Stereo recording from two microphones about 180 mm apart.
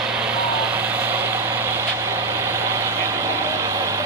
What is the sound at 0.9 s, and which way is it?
Vehicle, 10° right (ahead or behind).